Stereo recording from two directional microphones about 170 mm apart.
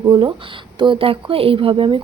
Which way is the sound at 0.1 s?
30° right (ahead or behind).